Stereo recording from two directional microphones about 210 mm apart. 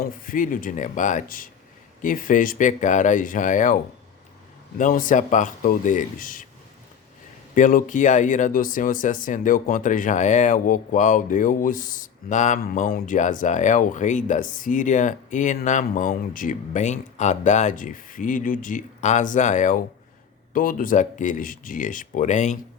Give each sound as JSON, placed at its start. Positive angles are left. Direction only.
{"t": 0.0, "sound": "speech", "side_deg": 40}
{"t": 4.8, "sound": "speech", "side_deg": 40}
{"t": 7.5, "sound": "speech", "side_deg": 40}